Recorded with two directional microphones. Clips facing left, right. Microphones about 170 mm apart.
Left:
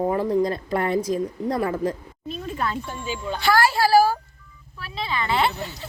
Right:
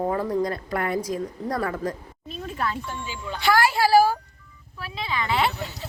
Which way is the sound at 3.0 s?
20° left (ahead or behind).